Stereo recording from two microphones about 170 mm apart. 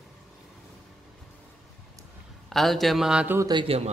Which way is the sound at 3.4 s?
25° right (ahead or behind).